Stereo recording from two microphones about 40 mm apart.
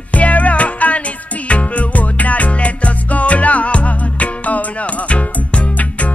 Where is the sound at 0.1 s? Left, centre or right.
Left.